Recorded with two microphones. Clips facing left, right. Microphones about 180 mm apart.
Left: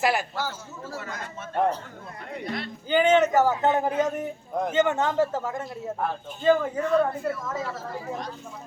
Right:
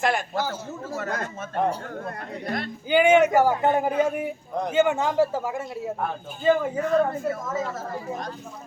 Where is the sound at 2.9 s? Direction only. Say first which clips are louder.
Right 2 dB; 10° right (ahead or behind).